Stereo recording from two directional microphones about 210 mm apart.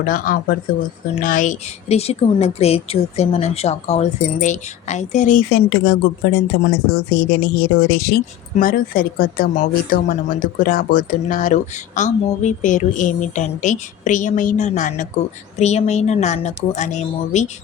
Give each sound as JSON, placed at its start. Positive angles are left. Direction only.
{"t": 0.0, "sound": "speech", "side_deg": 40}